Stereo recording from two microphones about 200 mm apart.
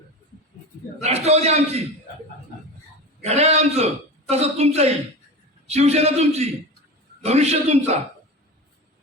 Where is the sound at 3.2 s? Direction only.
30° right (ahead or behind).